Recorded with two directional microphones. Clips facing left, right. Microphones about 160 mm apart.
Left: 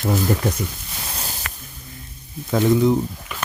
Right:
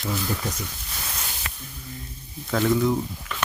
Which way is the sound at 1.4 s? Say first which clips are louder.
Left 3 dB; 65° left (ahead or behind).